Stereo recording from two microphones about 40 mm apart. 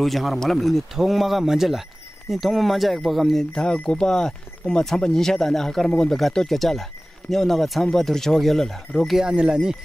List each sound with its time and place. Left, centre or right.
0.0 s speech: centre
3.5 s speech: left; by 9.1 s centre
9.2 s speech: right